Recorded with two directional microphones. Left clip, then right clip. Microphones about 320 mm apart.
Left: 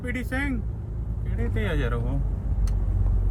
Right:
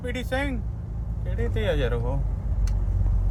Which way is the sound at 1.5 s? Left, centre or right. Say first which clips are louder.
Right 4 dB; right.